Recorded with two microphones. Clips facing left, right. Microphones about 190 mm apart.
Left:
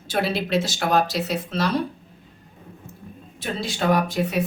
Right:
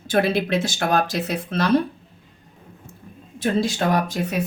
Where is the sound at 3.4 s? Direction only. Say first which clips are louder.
Right 5 dB; 45° right (ahead or behind).